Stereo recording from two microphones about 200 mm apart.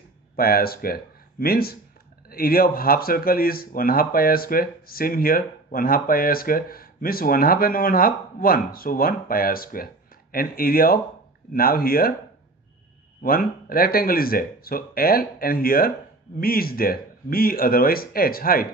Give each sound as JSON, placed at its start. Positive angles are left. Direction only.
{"t": 0.4, "sound": "speech", "side_deg": 50}
{"t": 13.2, "sound": "speech", "side_deg": 45}